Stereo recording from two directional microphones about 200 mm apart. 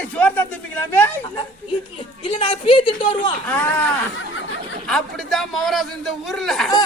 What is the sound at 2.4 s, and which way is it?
Speech, 25° left (ahead or behind).